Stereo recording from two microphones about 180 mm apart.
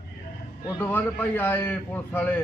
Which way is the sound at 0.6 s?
10° left (ahead or behind).